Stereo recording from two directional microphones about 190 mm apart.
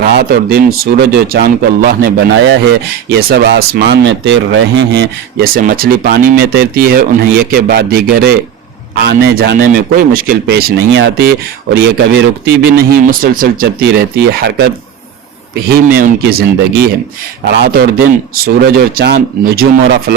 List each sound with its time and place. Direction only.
0.0 s speech: 55° right (ahead or behind)
2.1 s speech: 75° right (ahead or behind)
3.1 s speech: 55° right (ahead or behind)
5.6 s speech: 50° right (ahead or behind)
15.7 s speech: 50° right (ahead or behind)